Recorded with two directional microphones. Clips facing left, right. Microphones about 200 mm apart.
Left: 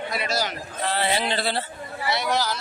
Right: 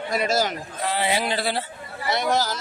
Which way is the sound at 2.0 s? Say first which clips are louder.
Right 2 dB; 50° right (ahead or behind).